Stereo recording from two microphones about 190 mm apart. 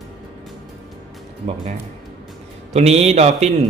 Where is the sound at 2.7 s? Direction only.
35° right (ahead or behind).